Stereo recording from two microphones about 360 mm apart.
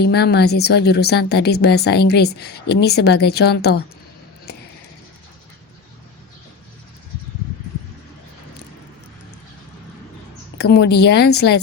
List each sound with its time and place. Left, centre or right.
0.0 s a woman's voice: left
10.6 s a woman's voice: left